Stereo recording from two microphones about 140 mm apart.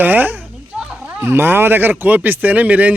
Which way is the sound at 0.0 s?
15° right (ahead or behind).